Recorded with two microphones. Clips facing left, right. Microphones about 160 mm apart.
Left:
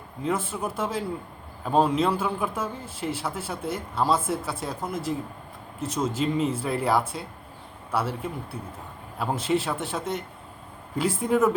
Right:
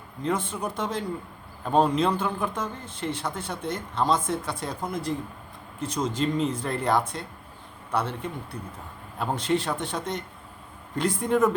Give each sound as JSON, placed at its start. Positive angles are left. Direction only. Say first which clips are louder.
{"t": 0.2, "sound": "a man's voice", "louder": "even", "side_deg": 5}